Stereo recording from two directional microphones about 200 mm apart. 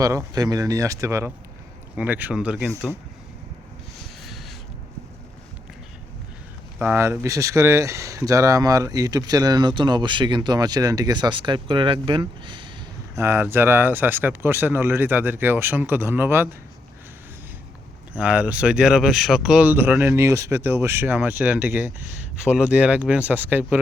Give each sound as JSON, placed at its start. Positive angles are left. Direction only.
{"t": 0.0, "sound": "speech", "side_deg": -15}
{"t": 4.2, "sound": "a sound", "side_deg": 0}
{"t": 6.7, "sound": "speech", "side_deg": -10}
{"t": 13.1, "sound": "speech", "side_deg": -10}
{"t": 18.1, "sound": "speech", "side_deg": -5}